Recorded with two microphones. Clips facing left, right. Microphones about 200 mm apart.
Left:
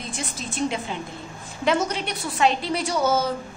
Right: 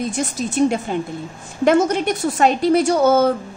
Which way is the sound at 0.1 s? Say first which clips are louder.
Right 10 dB; 45° right (ahead or behind).